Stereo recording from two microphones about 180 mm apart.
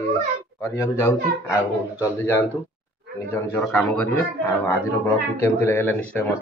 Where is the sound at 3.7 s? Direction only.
10° left (ahead or behind).